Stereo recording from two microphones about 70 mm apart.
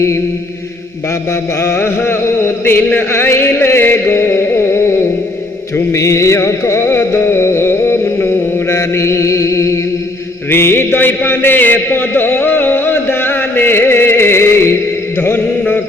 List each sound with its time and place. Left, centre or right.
1.6 s chant: left
8.7 s mantra: left
10.5 s a sound: left
15.2 s mantra: left